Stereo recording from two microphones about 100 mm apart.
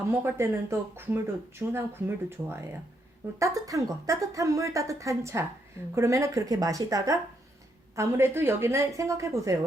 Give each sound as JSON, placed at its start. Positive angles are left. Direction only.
{"t": 0.1, "sound": "a woman's voice", "side_deg": -20}